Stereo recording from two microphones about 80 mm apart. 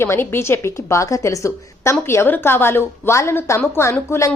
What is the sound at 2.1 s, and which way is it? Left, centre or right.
A woman's voice, left.